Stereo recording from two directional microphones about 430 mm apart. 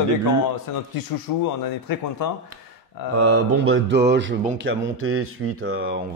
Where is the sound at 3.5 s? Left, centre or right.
Right.